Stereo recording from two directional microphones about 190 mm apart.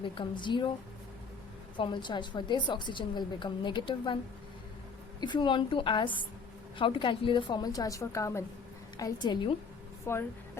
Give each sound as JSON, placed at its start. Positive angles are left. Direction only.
{"t": 0.0, "sound": "a woman's voice", "side_deg": 25}
{"t": 1.7, "sound": "a woman's voice", "side_deg": 25}
{"t": 5.2, "sound": "a woman's voice", "side_deg": 25}
{"t": 10.1, "sound": "speech", "side_deg": 15}